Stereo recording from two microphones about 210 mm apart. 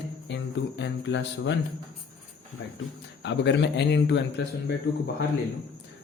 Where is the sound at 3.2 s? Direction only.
55° left (ahead or behind).